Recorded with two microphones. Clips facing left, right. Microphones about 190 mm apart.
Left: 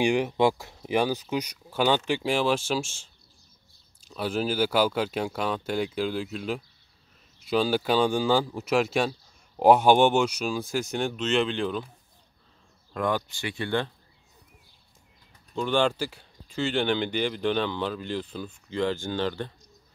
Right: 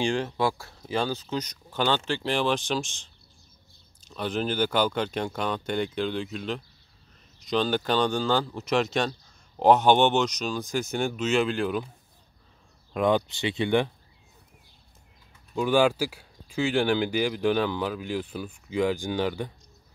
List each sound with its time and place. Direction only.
0.0 s speech: 15° left (ahead or behind)
4.1 s speech: 5° left (ahead or behind)
11.0 s speech: 5° right (ahead or behind)
12.9 s speech: 20° right (ahead or behind)
15.5 s speech: 5° right (ahead or behind)